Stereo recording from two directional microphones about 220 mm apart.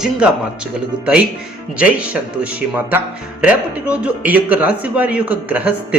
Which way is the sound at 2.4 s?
5° right (ahead or behind).